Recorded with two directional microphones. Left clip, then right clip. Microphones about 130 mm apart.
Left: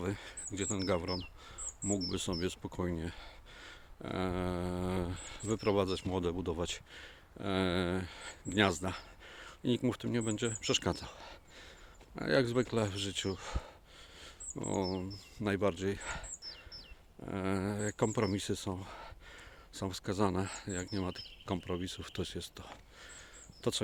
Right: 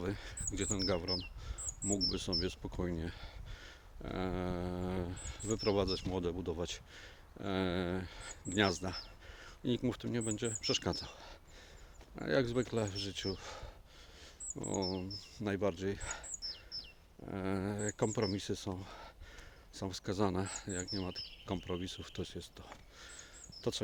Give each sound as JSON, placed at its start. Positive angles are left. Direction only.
{"t": 0.0, "sound": "speech", "side_deg": 20}
{"t": 0.9, "sound": "speech", "side_deg": 35}
{"t": 2.9, "sound": "a sound", "side_deg": 20}
{"t": 3.7, "sound": "speech", "side_deg": 30}
{"t": 6.9, "sound": "speech", "side_deg": 25}
{"t": 17.2, "sound": "speech", "side_deg": 25}
{"t": 20.9, "sound": "speech", "side_deg": 40}